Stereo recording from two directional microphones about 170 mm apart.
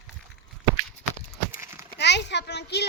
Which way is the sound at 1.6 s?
15° right (ahead or behind).